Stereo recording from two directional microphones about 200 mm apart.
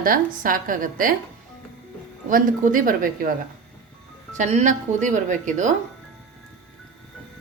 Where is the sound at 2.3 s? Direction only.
45° right (ahead or behind).